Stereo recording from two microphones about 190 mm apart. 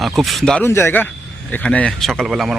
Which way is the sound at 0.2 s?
Centre (ahead or behind).